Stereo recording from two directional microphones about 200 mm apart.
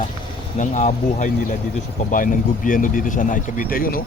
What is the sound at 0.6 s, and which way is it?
Speech, 40° left (ahead or behind).